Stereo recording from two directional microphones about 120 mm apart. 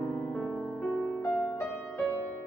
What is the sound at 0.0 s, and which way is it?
Music, 10° left (ahead or behind).